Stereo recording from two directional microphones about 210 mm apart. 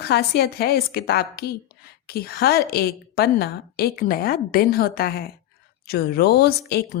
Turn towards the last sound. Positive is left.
turn(degrees=50)  # may be behind; listen again after turning